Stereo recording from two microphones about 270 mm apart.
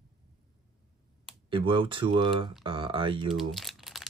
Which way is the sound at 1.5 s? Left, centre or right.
Centre.